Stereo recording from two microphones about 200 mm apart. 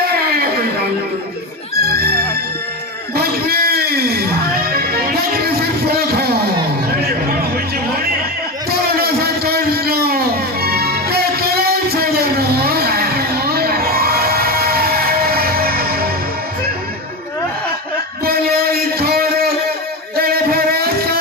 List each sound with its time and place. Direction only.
0.2 s a sound: 50° right (ahead or behind)
1.8 s music: 50° right (ahead or behind)
3.2 s a sound: 50° right (ahead or behind)
4.7 s music: 50° right (ahead or behind)
9.0 s music: 50° right (ahead or behind)
18.3 s music: 50° right (ahead or behind)